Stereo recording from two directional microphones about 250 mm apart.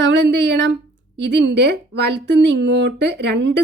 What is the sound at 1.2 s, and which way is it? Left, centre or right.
A woman's voice, right.